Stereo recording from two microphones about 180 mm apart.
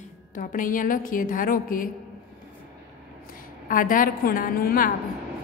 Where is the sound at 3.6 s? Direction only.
50° left (ahead or behind).